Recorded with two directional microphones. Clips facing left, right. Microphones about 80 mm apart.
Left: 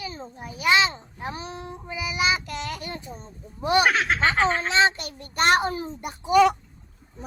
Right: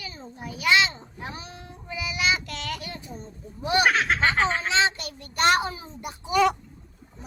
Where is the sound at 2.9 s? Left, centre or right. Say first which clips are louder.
Left 3 dB; left.